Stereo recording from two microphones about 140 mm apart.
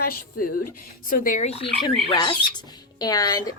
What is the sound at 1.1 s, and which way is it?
Speech, 75° left (ahead or behind).